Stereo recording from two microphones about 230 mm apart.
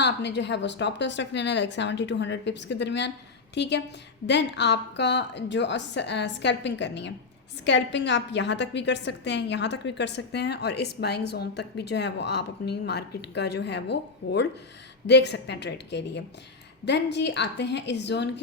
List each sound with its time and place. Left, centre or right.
0.0 s a woman's voice: left